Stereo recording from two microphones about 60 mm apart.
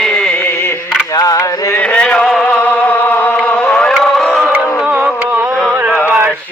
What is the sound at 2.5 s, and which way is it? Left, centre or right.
Music, left.